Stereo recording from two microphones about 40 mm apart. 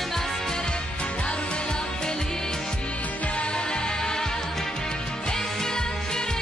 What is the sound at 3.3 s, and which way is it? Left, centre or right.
Music, left.